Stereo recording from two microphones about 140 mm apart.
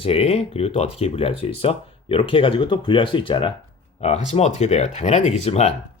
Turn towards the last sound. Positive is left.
turn(degrees=50)  # may be behind; listen again after turning